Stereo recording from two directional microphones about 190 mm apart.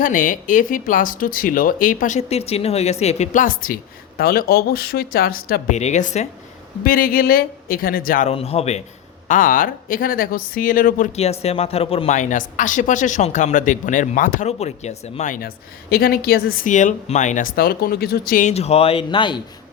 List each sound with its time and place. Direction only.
0.0 s speech: 45° left (ahead or behind)
6.8 s speech: 50° left (ahead or behind)
8.3 s speech: 30° left (ahead or behind)